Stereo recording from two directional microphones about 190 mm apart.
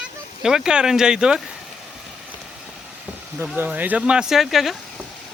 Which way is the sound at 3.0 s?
10° right (ahead or behind).